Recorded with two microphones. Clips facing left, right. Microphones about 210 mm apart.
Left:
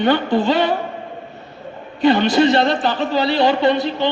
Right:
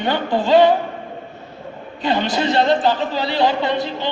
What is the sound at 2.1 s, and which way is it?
A man's voice, 65° left (ahead or behind).